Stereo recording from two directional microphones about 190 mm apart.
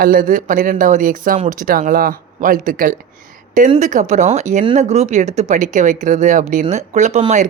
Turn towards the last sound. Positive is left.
turn(degrees=-35)  # may be behind; listen again after turning